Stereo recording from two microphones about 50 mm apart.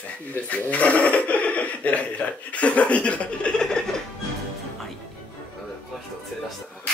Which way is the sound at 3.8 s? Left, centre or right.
Centre.